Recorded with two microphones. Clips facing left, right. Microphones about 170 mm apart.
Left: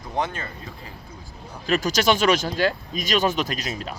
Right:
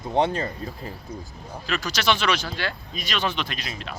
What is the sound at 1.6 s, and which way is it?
Speech, 45° left (ahead or behind).